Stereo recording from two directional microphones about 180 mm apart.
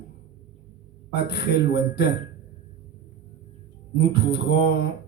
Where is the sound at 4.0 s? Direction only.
70° left (ahead or behind).